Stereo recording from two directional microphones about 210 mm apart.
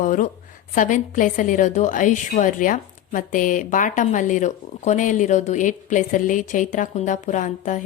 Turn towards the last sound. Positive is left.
turn(degrees=35)  # may be behind; listen again after turning